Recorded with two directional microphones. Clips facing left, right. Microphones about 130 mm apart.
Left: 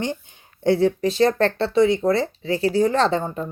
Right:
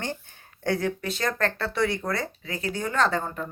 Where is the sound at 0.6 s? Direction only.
25° left (ahead or behind).